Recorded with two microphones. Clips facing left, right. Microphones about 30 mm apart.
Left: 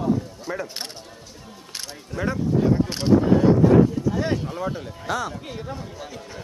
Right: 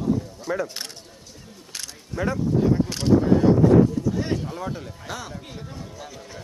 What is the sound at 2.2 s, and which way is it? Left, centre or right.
Speech, centre.